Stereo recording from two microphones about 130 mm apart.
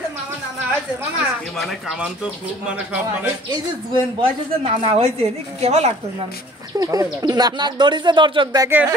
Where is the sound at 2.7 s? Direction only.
10° right (ahead or behind).